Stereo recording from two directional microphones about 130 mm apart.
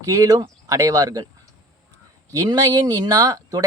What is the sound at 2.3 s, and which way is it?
Speech, 25° right (ahead or behind).